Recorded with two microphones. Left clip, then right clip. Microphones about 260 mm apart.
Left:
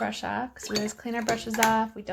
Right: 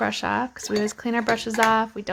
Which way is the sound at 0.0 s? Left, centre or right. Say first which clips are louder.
Right 6 dB; right.